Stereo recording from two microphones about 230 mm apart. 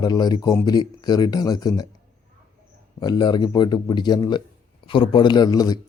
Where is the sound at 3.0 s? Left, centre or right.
Centre.